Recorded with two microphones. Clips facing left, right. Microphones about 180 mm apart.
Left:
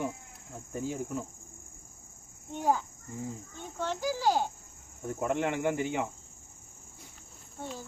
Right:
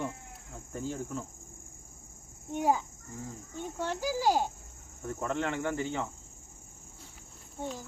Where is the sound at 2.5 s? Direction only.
10° right (ahead or behind).